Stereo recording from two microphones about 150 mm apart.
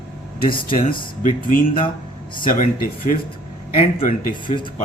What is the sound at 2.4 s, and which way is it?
Speech, 65° left (ahead or behind).